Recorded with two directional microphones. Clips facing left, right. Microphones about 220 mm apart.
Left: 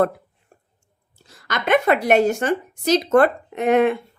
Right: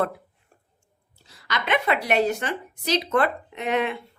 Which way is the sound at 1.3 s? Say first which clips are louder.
Left 6 dB; 50° left (ahead or behind).